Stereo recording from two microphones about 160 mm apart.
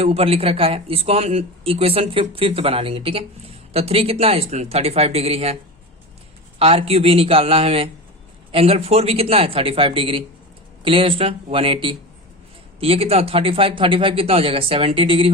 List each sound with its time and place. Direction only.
0.0 s speech: 40° right (ahead or behind)
6.6 s speech: 35° right (ahead or behind)